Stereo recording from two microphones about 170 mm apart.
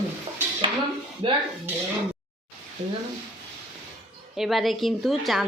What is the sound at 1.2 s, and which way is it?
Speech, 30° right (ahead or behind).